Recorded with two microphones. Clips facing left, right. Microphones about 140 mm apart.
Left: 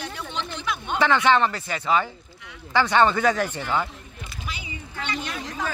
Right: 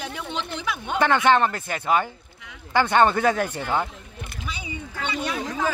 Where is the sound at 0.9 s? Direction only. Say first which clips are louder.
Right 1 dB; 50° right (ahead or behind).